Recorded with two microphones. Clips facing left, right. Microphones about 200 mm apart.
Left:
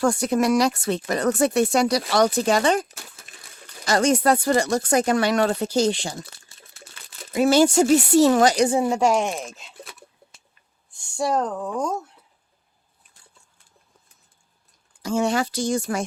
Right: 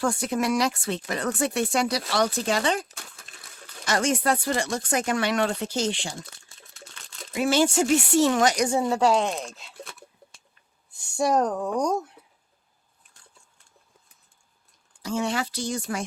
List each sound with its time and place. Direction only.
0.0 s speech: 45° left (ahead or behind)
2.9 s a sound: 5° left (ahead or behind)
3.8 s speech: 35° left (ahead or behind)
6.2 s crumpling: 5° left (ahead or behind)
7.3 s speech: 40° left (ahead or behind)
8.8 s speech: 15° left (ahead or behind)
11.3 s speech: 15° right (ahead or behind)
11.8 s speech: 5° left (ahead or behind)
15.0 s speech: 45° left (ahead or behind)